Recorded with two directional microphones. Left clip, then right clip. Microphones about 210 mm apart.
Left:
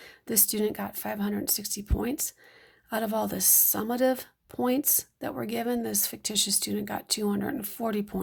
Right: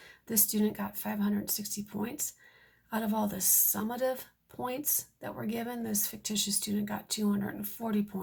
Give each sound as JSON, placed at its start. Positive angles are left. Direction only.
{"t": 0.0, "sound": "a woman's voice", "side_deg": 45}